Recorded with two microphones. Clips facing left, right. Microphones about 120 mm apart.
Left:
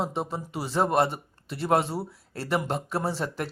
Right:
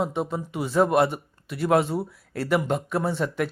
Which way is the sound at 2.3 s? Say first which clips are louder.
Right 5 dB; 30° left (ahead or behind).